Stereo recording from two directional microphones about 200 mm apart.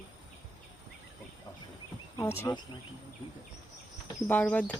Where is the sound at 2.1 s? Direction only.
15° left (ahead or behind).